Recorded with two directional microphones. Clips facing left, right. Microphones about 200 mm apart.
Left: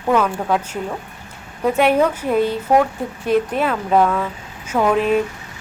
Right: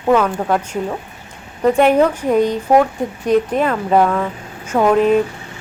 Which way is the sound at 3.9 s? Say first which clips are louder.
Right 1 dB; 5° right (ahead or behind).